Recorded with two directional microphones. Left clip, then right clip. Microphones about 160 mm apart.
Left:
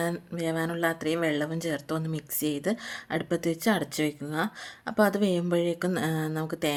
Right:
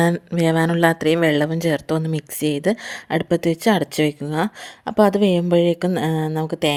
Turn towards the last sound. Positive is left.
turn(degrees=-35)  # may be behind; listen again after turning